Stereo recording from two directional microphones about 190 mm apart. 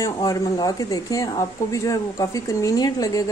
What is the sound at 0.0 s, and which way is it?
Speech, 20° left (ahead or behind).